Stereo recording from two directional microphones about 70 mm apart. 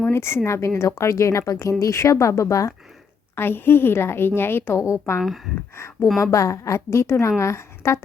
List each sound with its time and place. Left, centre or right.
0.0 s a woman's voice: left
3.3 s a woman's voice: left
4.8 s a woman's voice: left